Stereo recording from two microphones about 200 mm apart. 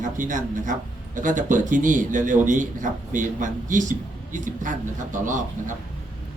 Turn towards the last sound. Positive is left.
turn(degrees=-40)  # may be behind; listen again after turning